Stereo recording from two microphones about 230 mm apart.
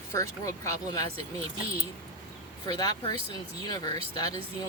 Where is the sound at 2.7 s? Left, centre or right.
Centre.